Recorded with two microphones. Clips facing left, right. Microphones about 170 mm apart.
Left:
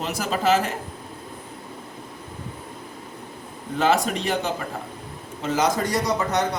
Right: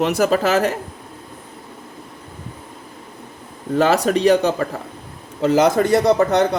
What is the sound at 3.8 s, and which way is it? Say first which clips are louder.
Speech: right 6 dB; 70° right (ahead or behind).